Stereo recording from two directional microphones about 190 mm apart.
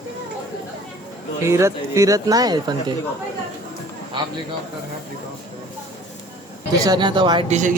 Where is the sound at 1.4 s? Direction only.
15° right (ahead or behind).